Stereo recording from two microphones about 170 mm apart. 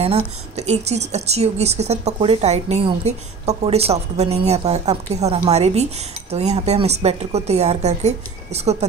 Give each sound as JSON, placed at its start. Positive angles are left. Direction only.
{"t": 0.6, "sound": "a woman's voice", "side_deg": -40}